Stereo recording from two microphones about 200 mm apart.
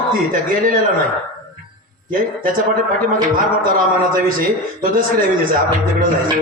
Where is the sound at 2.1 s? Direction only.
45° right (ahead or behind).